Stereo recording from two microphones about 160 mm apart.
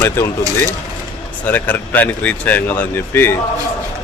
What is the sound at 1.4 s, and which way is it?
Speech, 10° left (ahead or behind).